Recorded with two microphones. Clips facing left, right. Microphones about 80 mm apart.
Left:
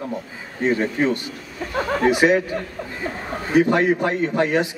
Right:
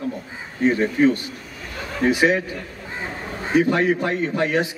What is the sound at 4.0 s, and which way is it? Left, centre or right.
Speech, left.